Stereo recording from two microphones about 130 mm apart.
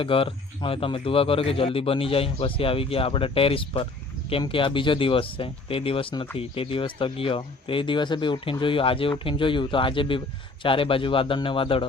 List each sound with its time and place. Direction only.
0.0 s speech: 45° left (ahead or behind)